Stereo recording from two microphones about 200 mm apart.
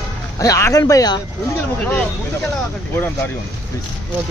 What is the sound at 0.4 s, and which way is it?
Speech, 15° left (ahead or behind).